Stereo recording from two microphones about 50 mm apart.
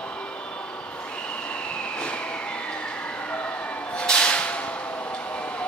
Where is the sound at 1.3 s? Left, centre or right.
Left.